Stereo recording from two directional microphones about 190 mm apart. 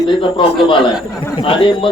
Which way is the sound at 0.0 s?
25° left (ahead or behind).